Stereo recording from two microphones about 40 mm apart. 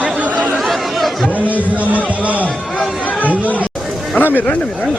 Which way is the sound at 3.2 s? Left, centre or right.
Left.